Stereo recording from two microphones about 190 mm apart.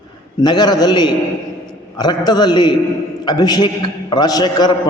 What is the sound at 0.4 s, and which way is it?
A man's voice, 20° left (ahead or behind).